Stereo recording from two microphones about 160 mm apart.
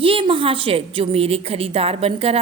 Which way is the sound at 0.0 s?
35° right (ahead or behind).